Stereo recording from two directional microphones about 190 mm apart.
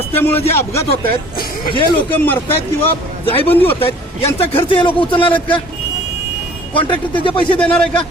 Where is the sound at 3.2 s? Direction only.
30° left (ahead or behind).